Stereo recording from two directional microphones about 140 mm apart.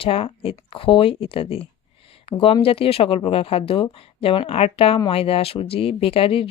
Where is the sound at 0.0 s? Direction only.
40° left (ahead or behind).